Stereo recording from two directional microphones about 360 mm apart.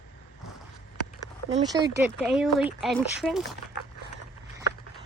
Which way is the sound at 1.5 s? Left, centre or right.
Centre.